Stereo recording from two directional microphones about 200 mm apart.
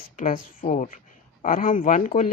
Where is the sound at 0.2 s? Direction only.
40° left (ahead or behind).